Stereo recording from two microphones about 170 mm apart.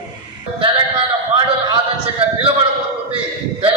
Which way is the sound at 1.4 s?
25° right (ahead or behind).